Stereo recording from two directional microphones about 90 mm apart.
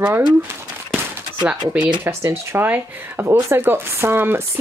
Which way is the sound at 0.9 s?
10° right (ahead or behind).